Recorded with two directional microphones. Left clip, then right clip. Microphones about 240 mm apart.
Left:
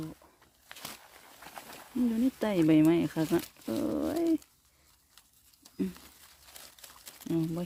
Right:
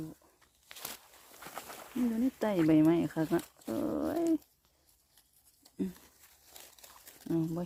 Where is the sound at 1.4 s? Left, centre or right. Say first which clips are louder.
Right 2 dB; right.